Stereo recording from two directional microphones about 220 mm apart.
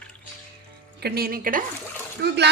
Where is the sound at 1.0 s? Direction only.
45° right (ahead or behind).